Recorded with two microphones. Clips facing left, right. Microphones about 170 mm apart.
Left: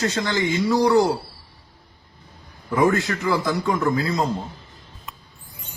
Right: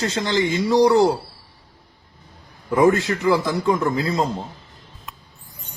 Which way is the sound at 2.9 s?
25° right (ahead or behind).